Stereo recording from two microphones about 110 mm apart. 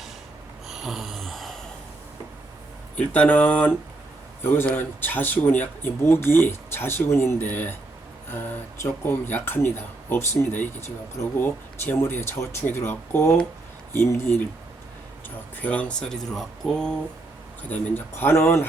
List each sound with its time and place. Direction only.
0.7 s a sound: 5° right (ahead or behind)
2.9 s speech: 10° left (ahead or behind)
15.6 s speech: 10° left (ahead or behind)
17.6 s speech: 15° left (ahead or behind)